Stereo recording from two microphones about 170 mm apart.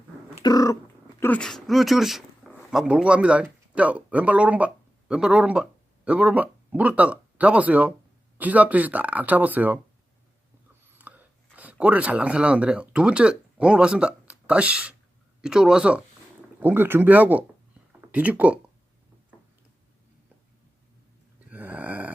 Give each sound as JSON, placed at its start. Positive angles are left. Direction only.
{"t": 0.4, "sound": "cat", "side_deg": 20}
{"t": 1.2, "sound": "speech", "side_deg": 5}
{"t": 10.9, "sound": "speech", "side_deg": -10}
{"t": 21.5, "sound": "a sound", "side_deg": -10}